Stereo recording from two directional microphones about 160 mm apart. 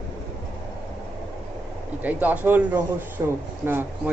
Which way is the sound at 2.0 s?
10° right (ahead or behind).